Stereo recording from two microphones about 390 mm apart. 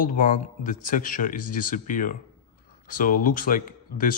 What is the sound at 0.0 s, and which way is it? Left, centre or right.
Speech, left.